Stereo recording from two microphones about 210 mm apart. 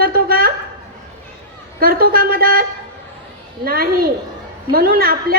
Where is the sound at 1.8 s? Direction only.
45° right (ahead or behind).